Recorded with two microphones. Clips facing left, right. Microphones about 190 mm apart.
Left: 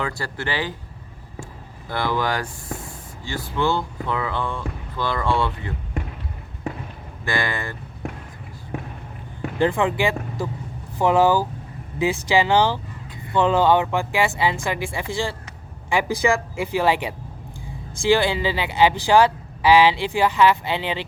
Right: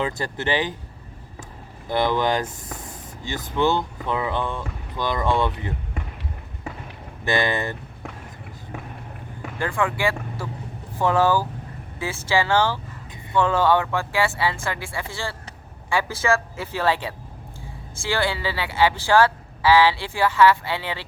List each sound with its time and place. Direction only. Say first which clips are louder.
0.0 s speech: right 2 dB; 20° right (ahead or behind)
1.9 s speech: right 3 dB; 20° right (ahead or behind)
7.3 s speech: right 3 dB; 20° right (ahead or behind)
9.6 s speech: left 4 dB; 20° left (ahead or behind)